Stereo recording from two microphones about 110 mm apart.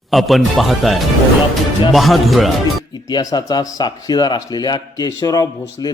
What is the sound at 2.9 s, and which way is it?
A man's voice, 35° left (ahead or behind).